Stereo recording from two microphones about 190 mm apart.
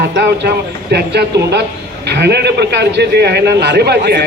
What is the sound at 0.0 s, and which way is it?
A man's voice, 60° right (ahead or behind).